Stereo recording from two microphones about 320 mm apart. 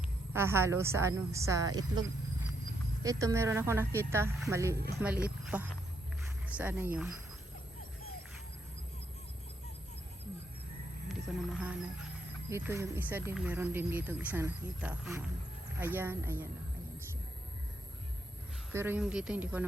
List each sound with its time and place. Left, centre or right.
0.3 s a woman's voice: centre
11.1 s music: centre
12.5 s a woman's voice: centre
18.7 s speech: centre